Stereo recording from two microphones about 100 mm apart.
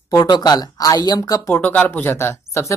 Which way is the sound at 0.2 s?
45° left (ahead or behind).